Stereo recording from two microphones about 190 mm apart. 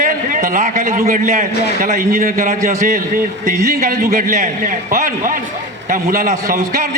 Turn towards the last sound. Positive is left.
turn(degrees=-40)  # may be behind; listen again after turning